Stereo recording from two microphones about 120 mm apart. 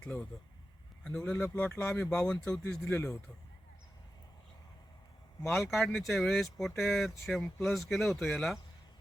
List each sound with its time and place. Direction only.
0.0 s speech: 5° left (ahead or behind)
1.4 s speech: 20° left (ahead or behind)
2.0 s speech: 5° left (ahead or behind)
2.8 s speech: 25° left (ahead or behind)
5.7 s speech: centre (ahead or behind)